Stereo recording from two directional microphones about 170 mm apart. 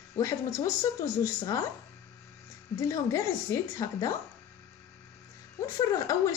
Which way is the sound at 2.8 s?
20° left (ahead or behind).